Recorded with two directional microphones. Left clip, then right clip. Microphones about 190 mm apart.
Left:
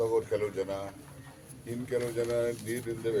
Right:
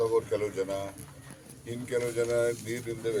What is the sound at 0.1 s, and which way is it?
Speech, 5° right (ahead or behind).